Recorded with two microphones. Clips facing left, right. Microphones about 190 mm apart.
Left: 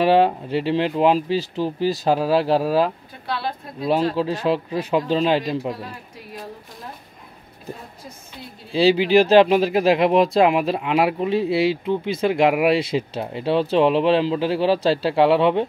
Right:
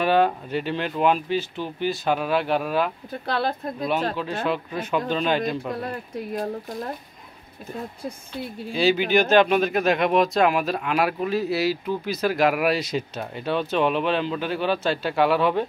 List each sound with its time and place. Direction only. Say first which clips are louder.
0.0 s speech: left 4 dB; 30° left (ahead or behind)
3.3 s speech: right 2 dB; 50° right (ahead or behind)
3.8 s speech: left 6 dB; 30° left (ahead or behind)
8.7 s speech: left 5 dB; 30° left (ahead or behind)